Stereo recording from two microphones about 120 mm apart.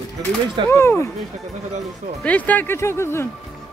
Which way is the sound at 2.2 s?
10° left (ahead or behind).